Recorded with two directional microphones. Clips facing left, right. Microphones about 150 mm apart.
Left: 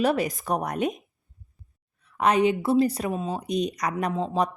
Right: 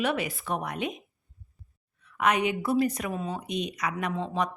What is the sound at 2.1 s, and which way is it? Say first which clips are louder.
A woman's voice: left 4 dB; 30° left (ahead or behind).